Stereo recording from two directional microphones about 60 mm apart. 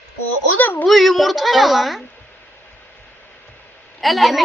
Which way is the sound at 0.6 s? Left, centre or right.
Left.